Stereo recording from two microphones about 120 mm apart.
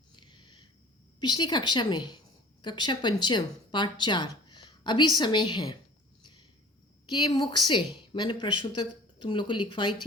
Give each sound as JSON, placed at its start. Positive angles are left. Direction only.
{"t": 0.2, "sound": "a sound", "side_deg": 40}
{"t": 1.2, "sound": "a woman's voice", "side_deg": 35}
{"t": 7.1, "sound": "a woman's voice", "side_deg": 35}